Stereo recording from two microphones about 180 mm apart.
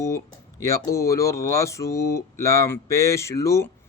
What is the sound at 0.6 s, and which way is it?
Speech, 15° left (ahead or behind).